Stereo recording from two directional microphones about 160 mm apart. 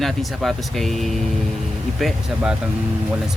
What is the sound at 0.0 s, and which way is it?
Speech, centre (ahead or behind).